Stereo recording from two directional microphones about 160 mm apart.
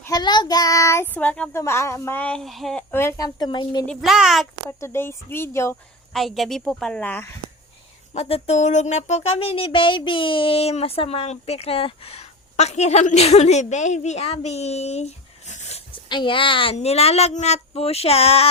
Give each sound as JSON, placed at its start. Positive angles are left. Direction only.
{"t": 0.0, "sound": "child singing", "side_deg": 25}
{"t": 2.9, "sound": "a woman's voice", "side_deg": 15}
{"t": 3.8, "sound": "a woman's voice", "side_deg": 0}
{"t": 4.8, "sound": "child singing", "side_deg": 15}
{"t": 6.1, "sound": "a woman's voice", "side_deg": 0}
{"t": 8.1, "sound": "speech", "side_deg": 45}
{"t": 15.9, "sound": "a woman's voice", "side_deg": 30}